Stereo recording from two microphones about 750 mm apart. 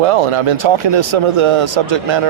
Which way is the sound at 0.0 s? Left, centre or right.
Right.